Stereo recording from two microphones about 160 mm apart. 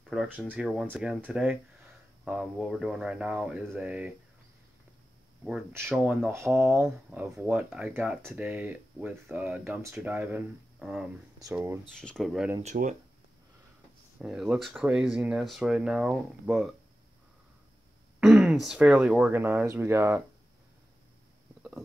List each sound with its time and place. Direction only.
0.0 s speech: 5° right (ahead or behind)
5.7 s speech: 15° right (ahead or behind)
11.5 s speech: 15° right (ahead or behind)
11.9 s speech: 5° left (ahead or behind)
12.6 s speech: 55° right (ahead or behind)
14.1 s speech: 5° right (ahead or behind)
18.2 s speech: 5° right (ahead or behind)